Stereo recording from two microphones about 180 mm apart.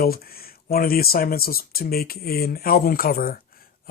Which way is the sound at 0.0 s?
55° left (ahead or behind).